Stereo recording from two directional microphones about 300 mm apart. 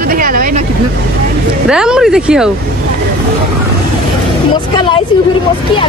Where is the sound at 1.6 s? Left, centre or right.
Centre.